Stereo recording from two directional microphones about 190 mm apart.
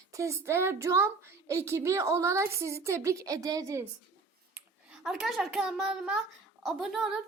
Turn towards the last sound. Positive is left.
turn(degrees=0)  # may be behind; listen again after turning